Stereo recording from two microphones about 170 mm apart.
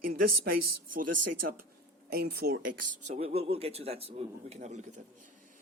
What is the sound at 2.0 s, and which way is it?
Speech, 65° right (ahead or behind).